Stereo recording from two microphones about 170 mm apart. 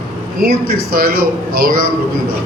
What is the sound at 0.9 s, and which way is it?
Speech, 65° right (ahead or behind).